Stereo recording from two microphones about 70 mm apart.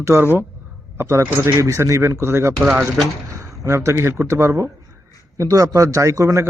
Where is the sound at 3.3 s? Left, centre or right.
Right.